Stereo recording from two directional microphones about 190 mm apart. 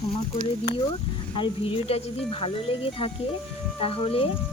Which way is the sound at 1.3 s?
30° left (ahead or behind).